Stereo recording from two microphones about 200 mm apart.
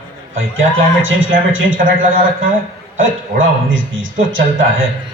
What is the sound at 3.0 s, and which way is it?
Speech, 75° right (ahead or behind).